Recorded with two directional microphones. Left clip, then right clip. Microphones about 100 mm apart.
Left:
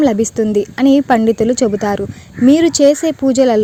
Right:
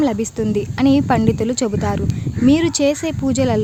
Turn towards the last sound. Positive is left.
turn(degrees=40)  # may be behind; listen again after turning